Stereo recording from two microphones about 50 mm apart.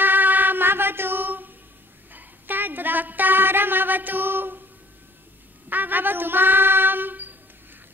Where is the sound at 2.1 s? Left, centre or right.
Right.